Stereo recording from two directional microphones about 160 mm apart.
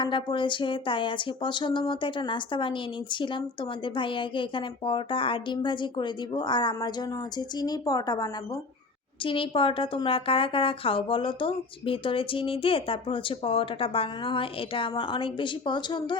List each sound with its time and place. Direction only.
0.0 s a woman's voice: 30° left (ahead or behind)